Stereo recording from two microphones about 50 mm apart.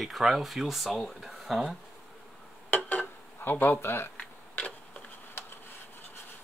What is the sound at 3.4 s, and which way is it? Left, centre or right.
Speech, left.